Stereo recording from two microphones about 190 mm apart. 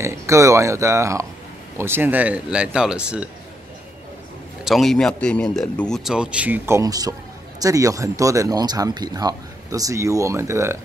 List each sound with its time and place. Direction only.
0.0 s speech: 15° right (ahead or behind)
4.6 s speech: centre (ahead or behind)